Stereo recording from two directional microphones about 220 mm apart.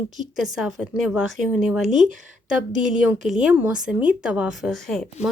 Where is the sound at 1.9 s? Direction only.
35° right (ahead or behind).